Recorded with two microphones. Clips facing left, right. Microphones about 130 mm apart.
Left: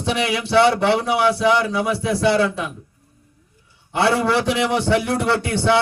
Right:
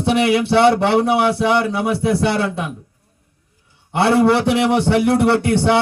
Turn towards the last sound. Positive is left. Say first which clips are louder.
# right 5 dB
turn(degrees=-60)  # may be behind; listen again after turning